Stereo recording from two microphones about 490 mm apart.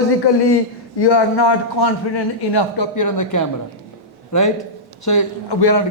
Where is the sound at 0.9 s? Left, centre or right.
Left.